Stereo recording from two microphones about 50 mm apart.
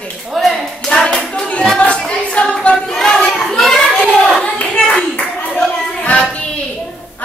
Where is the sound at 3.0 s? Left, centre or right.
Centre.